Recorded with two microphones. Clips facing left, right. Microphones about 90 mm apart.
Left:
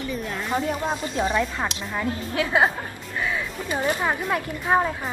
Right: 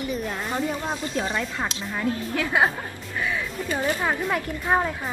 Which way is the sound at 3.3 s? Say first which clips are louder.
Right 1 dB; 20° left (ahead or behind).